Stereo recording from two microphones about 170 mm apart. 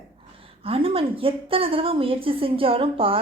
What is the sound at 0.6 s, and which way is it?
A woman's voice, 35° right (ahead or behind).